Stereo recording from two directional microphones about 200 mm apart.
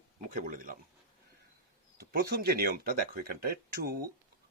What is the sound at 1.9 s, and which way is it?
Speech, 50° right (ahead or behind).